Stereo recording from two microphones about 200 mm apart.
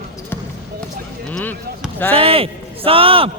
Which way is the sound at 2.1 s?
30° right (ahead or behind).